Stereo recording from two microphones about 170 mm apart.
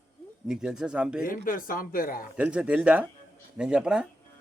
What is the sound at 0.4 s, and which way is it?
Speech, 5° right (ahead or behind).